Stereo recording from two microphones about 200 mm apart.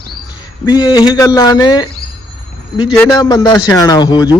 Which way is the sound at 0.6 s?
20° left (ahead or behind).